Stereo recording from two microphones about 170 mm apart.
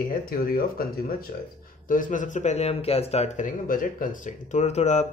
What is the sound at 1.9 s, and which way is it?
Speech, 50° left (ahead or behind).